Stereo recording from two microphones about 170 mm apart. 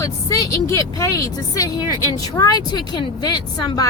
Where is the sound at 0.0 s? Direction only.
20° left (ahead or behind).